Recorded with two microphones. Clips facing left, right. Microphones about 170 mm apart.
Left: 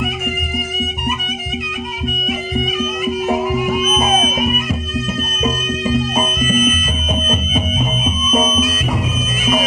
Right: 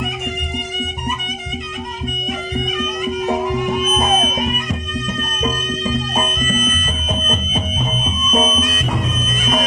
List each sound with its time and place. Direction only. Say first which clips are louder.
2.2 s music: left 2 dB; 5° left (ahead or behind)
9.4 s bagpipes: left 2 dB; 10° left (ahead or behind)